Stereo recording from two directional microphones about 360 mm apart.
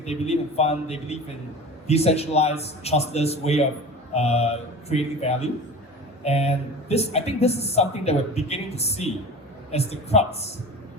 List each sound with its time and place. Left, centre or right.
0.0 s speech: centre